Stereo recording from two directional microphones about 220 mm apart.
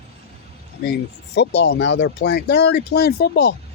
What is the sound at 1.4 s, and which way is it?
A man's voice, 50° left (ahead or behind).